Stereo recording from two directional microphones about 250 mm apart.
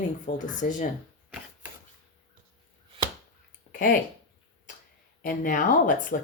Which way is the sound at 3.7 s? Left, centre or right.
Left.